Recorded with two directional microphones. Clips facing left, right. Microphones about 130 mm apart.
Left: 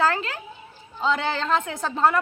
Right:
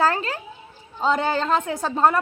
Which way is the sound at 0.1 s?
40° right (ahead or behind).